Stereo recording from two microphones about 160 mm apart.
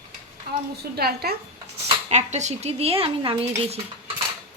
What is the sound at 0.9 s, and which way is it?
Speech, 75° right (ahead or behind).